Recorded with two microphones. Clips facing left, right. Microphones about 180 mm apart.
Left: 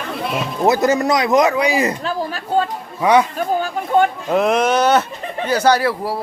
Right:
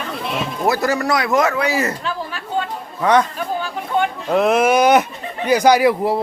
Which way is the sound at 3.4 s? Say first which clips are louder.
Left 4 dB; 45° left (ahead or behind).